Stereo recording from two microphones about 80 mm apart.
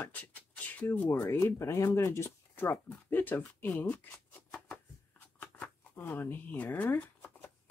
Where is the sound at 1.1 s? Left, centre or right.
Left.